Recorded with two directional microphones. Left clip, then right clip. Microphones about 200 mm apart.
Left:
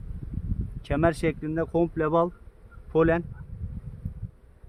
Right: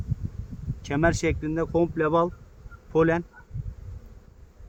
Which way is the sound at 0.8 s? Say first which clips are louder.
Right 1 dB; 30° left (ahead or behind).